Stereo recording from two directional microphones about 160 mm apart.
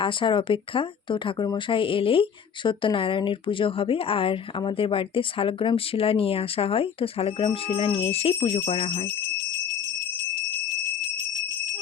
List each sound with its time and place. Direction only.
0.0 s speech: 30° left (ahead or behind)